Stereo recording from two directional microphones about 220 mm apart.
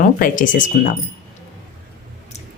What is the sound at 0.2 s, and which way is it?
Speech, 35° left (ahead or behind).